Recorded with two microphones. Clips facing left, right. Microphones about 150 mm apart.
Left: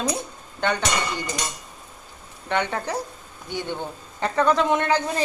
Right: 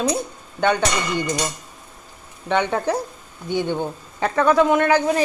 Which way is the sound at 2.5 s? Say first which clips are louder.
Right 5 dB; 15° right (ahead or behind).